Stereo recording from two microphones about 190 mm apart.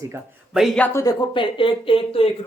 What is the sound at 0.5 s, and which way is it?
Speech, centre (ahead or behind).